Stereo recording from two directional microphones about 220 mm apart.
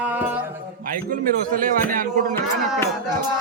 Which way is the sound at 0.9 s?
40° right (ahead or behind).